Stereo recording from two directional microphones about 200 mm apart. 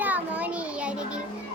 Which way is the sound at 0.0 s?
10° right (ahead or behind).